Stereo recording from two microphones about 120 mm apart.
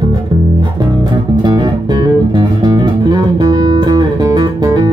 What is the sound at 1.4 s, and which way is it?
Music, 40° right (ahead or behind).